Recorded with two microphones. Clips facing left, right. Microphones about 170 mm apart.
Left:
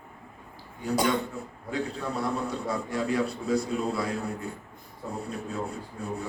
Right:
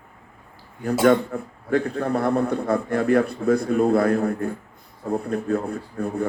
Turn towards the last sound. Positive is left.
turn(degrees=-55)  # may be behind; listen again after turning